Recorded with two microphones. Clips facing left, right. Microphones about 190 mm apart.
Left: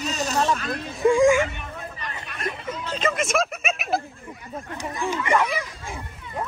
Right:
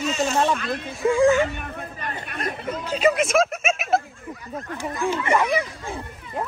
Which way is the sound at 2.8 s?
10° right (ahead or behind).